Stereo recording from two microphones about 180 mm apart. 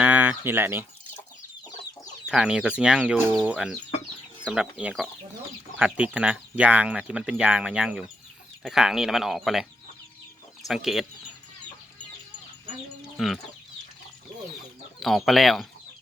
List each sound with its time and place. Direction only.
0.0 s speech: 10° right (ahead or behind)
2.2 s speech: 5° right (ahead or behind)
10.6 s speech: 20° left (ahead or behind)
13.1 s speech: centre (ahead or behind)
15.0 s speech: centre (ahead or behind)